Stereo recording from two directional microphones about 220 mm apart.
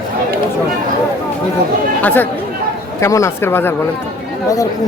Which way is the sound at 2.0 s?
10° left (ahead or behind).